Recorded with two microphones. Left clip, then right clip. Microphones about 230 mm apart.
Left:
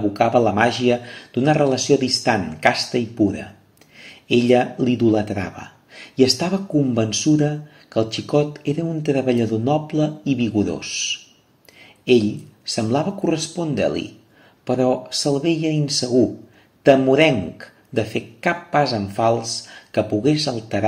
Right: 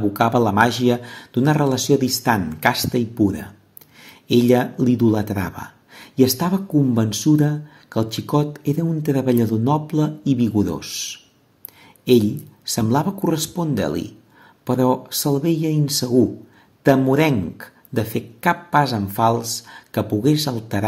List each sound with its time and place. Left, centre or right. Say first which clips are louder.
0.1 s speech: left 2 dB; right
12.6 s speech: even; right